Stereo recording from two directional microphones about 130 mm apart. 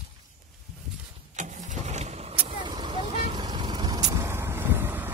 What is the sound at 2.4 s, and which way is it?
Vehicle, 35° right (ahead or behind).